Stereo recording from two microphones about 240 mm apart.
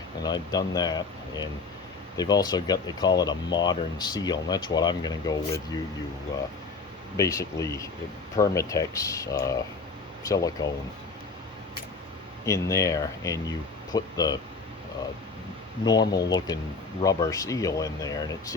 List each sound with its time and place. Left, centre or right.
0.2 s speech: centre
7.2 s speech: centre
12.5 s speech: centre
15.8 s speech: centre